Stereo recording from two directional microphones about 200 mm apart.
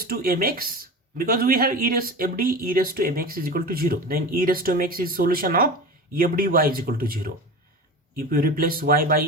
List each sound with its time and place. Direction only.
0.1 s speech: 50° right (ahead or behind)